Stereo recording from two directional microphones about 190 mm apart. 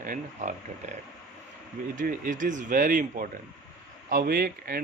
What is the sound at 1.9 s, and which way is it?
Speech, 45° right (ahead or behind).